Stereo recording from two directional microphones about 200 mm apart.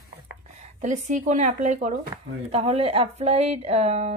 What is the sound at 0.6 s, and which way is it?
Speech, 35° right (ahead or behind).